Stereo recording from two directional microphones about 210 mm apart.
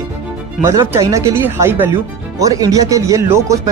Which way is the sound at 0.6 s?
15° right (ahead or behind).